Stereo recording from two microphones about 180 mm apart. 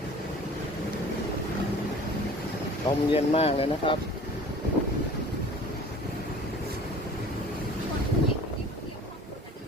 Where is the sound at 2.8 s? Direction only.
35° left (ahead or behind).